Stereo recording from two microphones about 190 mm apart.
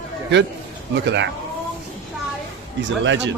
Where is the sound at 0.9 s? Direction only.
65° right (ahead or behind).